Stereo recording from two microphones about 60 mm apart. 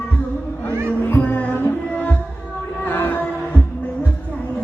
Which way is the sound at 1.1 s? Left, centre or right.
Left.